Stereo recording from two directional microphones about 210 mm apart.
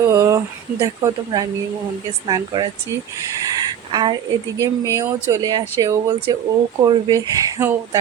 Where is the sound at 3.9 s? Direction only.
20° right (ahead or behind).